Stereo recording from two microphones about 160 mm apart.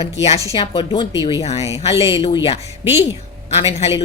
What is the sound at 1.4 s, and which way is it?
Speech, 40° left (ahead or behind).